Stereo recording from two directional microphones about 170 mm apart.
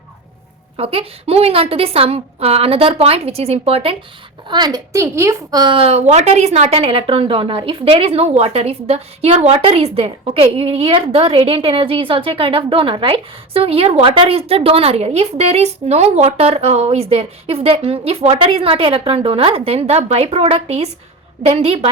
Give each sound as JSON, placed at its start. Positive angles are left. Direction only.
{"t": 0.8, "sound": "speech", "side_deg": -35}
{"t": 4.4, "sound": "speech", "side_deg": -25}